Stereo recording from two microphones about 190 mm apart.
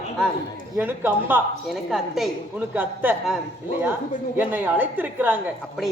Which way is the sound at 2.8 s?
10° right (ahead or behind).